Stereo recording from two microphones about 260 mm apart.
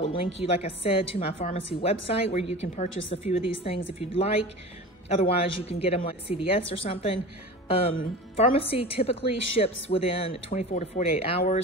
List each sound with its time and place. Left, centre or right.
0.1 s a woman's voice: left